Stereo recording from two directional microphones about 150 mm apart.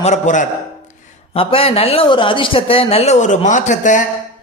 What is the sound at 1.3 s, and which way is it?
A man's voice, 40° left (ahead or behind).